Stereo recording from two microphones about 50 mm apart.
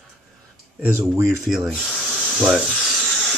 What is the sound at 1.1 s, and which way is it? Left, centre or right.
Speech, right.